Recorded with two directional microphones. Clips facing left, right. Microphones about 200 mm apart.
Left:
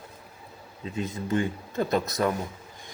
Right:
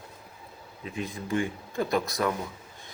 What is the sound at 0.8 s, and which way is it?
Speech, 20° left (ahead or behind).